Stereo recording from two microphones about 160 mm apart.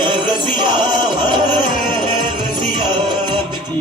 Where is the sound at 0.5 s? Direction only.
30° right (ahead or behind).